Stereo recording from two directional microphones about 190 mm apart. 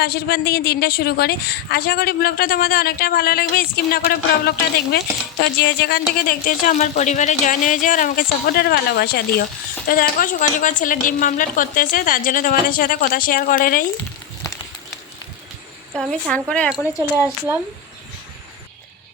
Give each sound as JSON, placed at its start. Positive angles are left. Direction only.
{"t": 0.0, "sound": "a woman's voice", "side_deg": 55}
{"t": 6.1, "sound": "a woman's voice", "side_deg": 50}
{"t": 16.0, "sound": "speech", "side_deg": 0}